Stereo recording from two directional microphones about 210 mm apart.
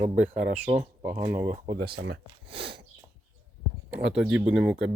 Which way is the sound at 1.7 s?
55° right (ahead or behind).